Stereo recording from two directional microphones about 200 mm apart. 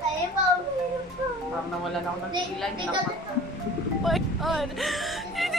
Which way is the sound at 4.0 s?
Centre (ahead or behind).